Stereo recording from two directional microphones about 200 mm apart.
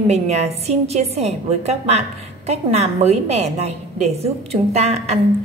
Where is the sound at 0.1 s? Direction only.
30° right (ahead or behind).